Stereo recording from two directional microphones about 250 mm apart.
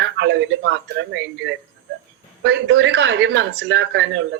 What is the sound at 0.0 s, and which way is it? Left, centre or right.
Speech, right.